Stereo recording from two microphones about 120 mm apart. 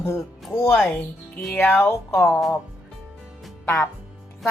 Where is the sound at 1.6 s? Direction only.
20° left (ahead or behind).